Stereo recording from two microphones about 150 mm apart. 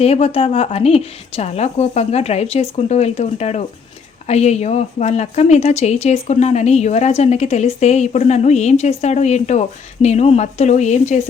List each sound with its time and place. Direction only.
0.0 s a woman's voice: 45° left (ahead or behind)